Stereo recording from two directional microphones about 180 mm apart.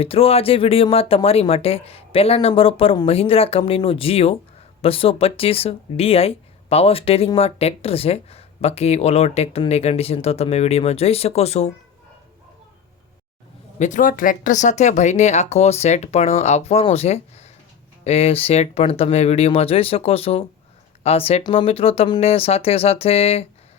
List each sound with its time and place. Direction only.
0.0 s speech: 30° left (ahead or behind)
13.7 s speech: 45° left (ahead or behind)